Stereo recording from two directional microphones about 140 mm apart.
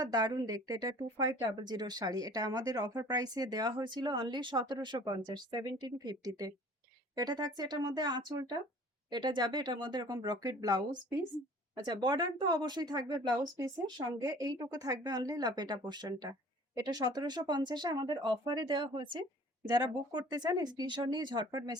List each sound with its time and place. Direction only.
0.0 s speech: 30° right (ahead or behind)